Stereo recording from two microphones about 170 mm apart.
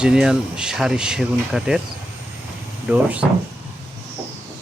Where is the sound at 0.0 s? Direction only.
5° right (ahead or behind).